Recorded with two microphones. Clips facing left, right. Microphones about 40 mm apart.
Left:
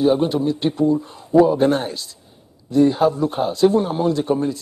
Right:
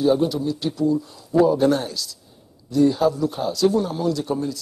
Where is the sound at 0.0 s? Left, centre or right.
Left.